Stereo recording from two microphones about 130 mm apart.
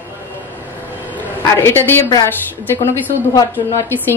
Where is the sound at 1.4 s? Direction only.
20° left (ahead or behind).